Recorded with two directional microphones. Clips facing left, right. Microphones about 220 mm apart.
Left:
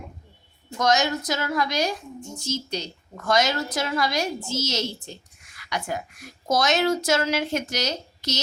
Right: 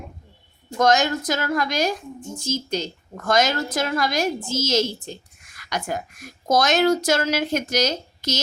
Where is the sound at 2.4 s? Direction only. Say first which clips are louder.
Right 4 dB; 90° right.